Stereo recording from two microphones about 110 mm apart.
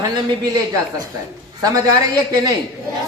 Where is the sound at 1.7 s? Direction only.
30° right (ahead or behind).